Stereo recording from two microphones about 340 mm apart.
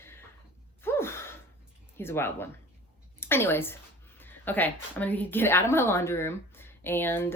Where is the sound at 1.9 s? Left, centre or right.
Centre.